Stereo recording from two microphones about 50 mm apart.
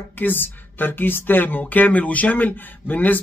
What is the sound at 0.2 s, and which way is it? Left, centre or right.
Speech, left.